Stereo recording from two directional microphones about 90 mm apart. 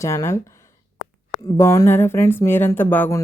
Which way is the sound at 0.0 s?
35° left (ahead or behind).